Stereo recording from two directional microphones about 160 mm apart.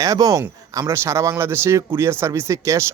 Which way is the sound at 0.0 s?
20° right (ahead or behind).